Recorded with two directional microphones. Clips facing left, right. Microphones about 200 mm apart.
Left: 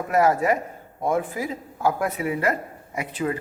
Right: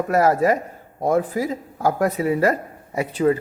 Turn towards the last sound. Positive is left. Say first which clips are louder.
# right 8 dB
turn(degrees=-30)  # may be behind; listen again after turning